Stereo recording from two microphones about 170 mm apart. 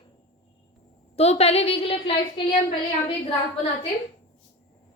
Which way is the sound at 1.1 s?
40° left (ahead or behind).